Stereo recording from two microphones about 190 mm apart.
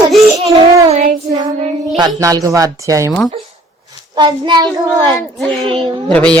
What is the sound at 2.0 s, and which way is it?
Speech, 20° right (ahead or behind).